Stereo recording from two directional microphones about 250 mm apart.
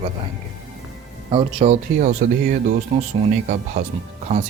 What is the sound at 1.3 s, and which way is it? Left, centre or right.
Speech, right.